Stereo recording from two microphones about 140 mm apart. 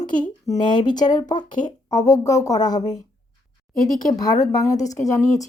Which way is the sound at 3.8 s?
75° left (ahead or behind).